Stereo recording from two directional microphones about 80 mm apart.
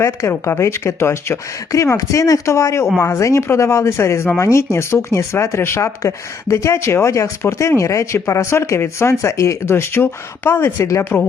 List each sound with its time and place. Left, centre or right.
0.0 s speech: left